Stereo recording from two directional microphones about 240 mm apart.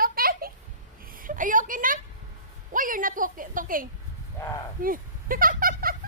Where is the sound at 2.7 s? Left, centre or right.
Right.